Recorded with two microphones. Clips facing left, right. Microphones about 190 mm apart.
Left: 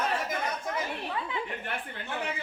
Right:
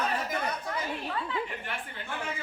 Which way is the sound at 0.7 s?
15° left (ahead or behind).